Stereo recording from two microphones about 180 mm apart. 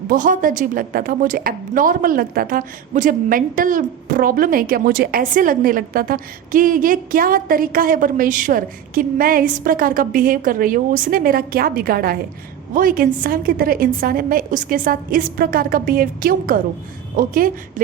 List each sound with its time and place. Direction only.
0.1 s a woman's voice: 50° right (ahead or behind)